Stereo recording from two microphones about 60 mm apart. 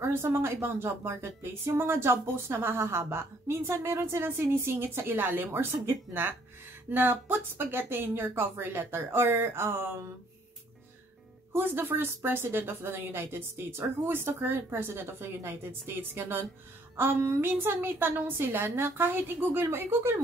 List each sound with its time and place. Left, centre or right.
0.0 s a woman's voice: right
11.5 s speech: right